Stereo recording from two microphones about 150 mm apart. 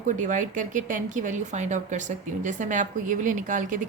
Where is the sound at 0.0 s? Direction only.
55° right (ahead or behind).